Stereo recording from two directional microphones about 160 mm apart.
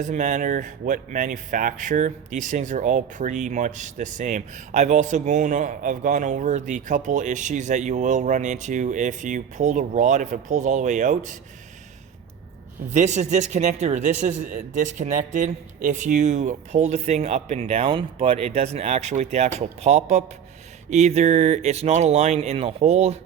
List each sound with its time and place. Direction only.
0.0 s speech: 50° right (ahead or behind)
12.9 s speech: 45° right (ahead or behind)